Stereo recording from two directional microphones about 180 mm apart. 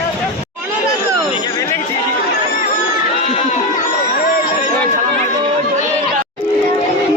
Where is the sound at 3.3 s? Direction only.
40° left (ahead or behind).